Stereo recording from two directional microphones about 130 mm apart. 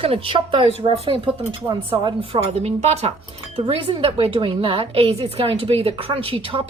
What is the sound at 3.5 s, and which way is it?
A woman's voice, 40° right (ahead or behind).